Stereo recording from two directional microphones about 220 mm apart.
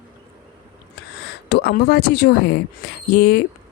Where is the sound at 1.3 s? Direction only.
50° left (ahead or behind).